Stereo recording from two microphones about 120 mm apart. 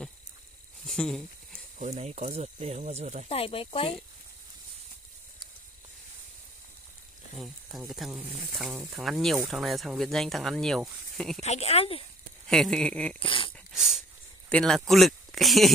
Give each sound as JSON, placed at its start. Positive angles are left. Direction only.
{"t": 0.8, "sound": "a sound", "side_deg": 5}
{"t": 1.8, "sound": "speech", "side_deg": -65}
{"t": 3.3, "sound": "speech", "side_deg": 55}
{"t": 7.3, "sound": "speech", "side_deg": 0}
{"t": 11.4, "sound": "speech", "side_deg": 65}
{"t": 12.4, "sound": "speech", "side_deg": 5}
{"t": 13.2, "sound": "speech", "side_deg": 45}
{"t": 13.7, "sound": "a sound", "side_deg": -5}
{"t": 14.5, "sound": "speech", "side_deg": 5}